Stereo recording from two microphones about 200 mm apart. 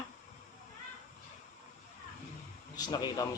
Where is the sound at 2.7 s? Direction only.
20° left (ahead or behind).